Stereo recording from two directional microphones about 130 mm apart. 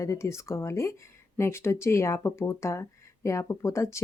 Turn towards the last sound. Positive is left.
turn(degrees=20)  # may be behind; listen again after turning